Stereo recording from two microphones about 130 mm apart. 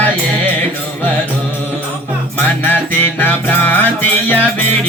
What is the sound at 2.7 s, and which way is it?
Music, 15° left (ahead or behind).